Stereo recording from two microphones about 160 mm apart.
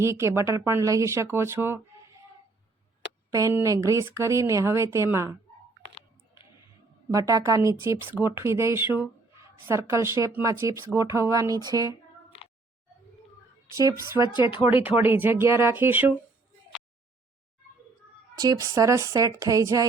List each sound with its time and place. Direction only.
0.0 s speech: 15° right (ahead or behind)
3.3 s speech: 20° right (ahead or behind)
7.1 s speech: 20° right (ahead or behind)
14.3 s speech: 30° left (ahead or behind)
14.7 s speech: 10° right (ahead or behind)
18.3 s speech: 20° right (ahead or behind)